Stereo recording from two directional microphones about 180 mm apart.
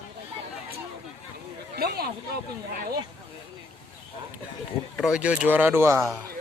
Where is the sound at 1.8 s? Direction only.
60° right (ahead or behind).